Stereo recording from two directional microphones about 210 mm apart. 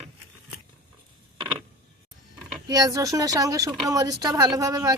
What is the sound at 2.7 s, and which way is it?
Speech, 15° right (ahead or behind).